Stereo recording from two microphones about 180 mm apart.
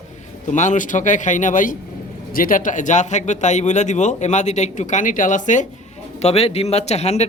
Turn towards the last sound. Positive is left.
turn(degrees=35)  # may be behind; listen again after turning